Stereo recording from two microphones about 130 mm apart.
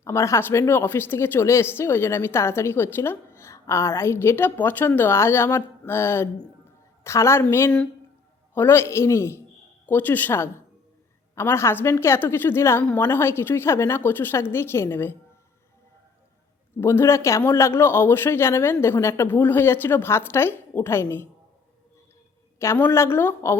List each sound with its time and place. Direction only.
0.0 s speech: 20° left (ahead or behind)
16.8 s speech: 20° left (ahead or behind)
22.5 s speech: 20° left (ahead or behind)